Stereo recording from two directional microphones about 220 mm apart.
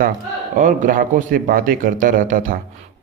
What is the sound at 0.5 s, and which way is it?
A man's voice, 35° right (ahead or behind).